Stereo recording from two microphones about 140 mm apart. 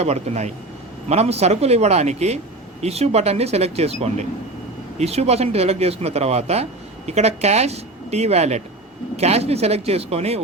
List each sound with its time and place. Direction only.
0.0 s speech: 50° right (ahead or behind)